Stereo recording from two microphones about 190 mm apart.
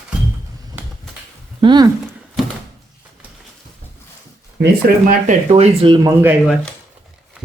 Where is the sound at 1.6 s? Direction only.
20° right (ahead or behind).